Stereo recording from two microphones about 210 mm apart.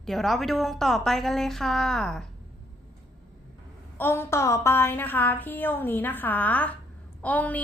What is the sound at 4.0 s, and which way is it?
A woman's voice, 10° left (ahead or behind).